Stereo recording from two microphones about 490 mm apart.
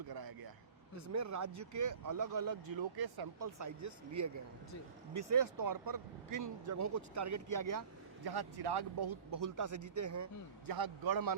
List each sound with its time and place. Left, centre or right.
0.1 s vehicle: right
1.1 s speech: right
10.7 s a man's voice: right